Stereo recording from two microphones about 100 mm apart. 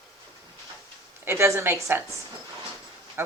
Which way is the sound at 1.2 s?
25° right (ahead or behind).